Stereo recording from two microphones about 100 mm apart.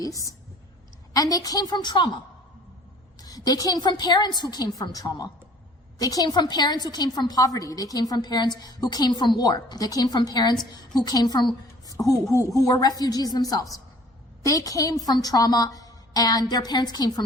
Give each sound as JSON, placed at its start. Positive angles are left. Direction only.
{"t": 1.1, "sound": "a woman's voice", "side_deg": 35}
{"t": 3.2, "sound": "a woman's voice", "side_deg": 40}